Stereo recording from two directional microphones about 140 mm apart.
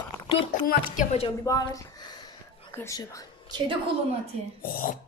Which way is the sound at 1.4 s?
25° left (ahead or behind).